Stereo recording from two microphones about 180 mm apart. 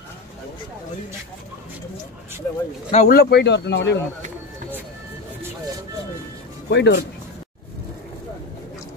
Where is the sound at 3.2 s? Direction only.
65° left (ahead or behind).